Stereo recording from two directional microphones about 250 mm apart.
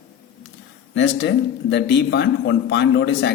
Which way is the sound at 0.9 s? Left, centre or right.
Left.